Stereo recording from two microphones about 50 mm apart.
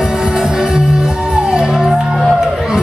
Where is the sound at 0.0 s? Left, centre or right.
Centre.